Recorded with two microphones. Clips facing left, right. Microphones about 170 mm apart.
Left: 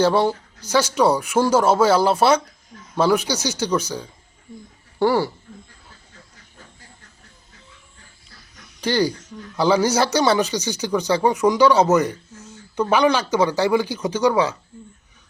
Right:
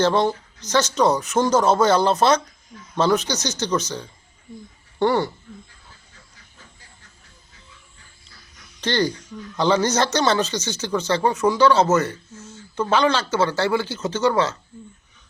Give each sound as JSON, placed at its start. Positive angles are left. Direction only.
{"t": 0.0, "sound": "speech", "side_deg": 10}
{"t": 8.8, "sound": "speech", "side_deg": 10}